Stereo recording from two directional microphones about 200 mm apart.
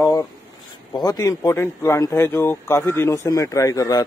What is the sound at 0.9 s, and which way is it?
Speech, 20° left (ahead or behind).